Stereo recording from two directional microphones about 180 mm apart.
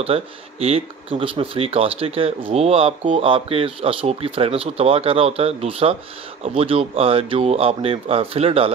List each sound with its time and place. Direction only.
0.0 s speech: 35° right (ahead or behind)